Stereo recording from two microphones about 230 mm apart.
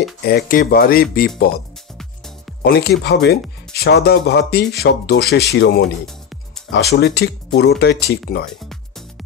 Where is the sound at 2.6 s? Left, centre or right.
Left.